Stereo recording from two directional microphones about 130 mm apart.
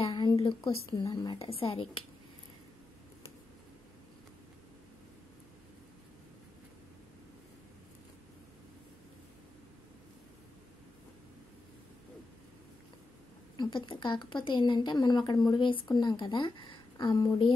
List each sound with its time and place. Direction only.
0.4 s a woman's voice: 40° left (ahead or behind)
13.6 s a woman's voice: 35° left (ahead or behind)